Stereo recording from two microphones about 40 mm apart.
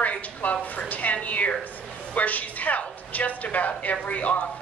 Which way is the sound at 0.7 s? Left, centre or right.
Left.